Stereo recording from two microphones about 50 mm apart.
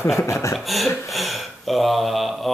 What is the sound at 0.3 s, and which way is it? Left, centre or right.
Speech, left.